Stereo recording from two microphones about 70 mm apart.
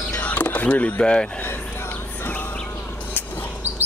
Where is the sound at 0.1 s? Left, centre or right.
Left.